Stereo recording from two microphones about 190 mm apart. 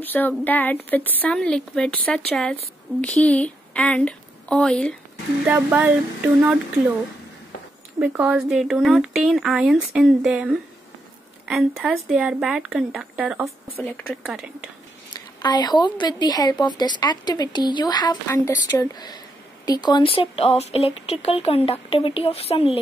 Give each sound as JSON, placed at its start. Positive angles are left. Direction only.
{"t": 0.0, "sound": "a woman's voice", "side_deg": 10}
{"t": 5.5, "sound": "a sound", "side_deg": -5}
{"t": 8.0, "sound": "a woman's voice", "side_deg": -5}
{"t": 15.1, "sound": "a woman's voice", "side_deg": 20}